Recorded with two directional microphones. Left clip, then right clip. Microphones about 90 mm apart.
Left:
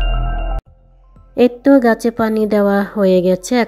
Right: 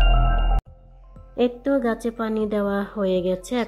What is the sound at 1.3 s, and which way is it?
A woman's voice, 50° left (ahead or behind).